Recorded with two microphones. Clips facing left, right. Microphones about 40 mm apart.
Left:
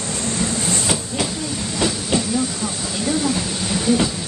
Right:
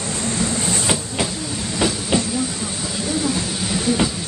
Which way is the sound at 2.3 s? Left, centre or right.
Centre.